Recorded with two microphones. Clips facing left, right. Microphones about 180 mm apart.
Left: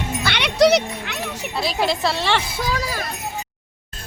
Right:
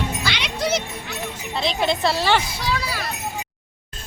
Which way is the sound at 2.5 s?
50° left (ahead or behind).